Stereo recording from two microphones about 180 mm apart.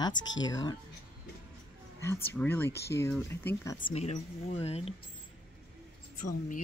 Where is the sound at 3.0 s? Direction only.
10° left (ahead or behind).